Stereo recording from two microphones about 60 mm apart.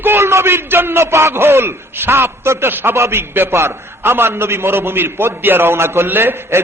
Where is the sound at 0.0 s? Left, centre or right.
Right.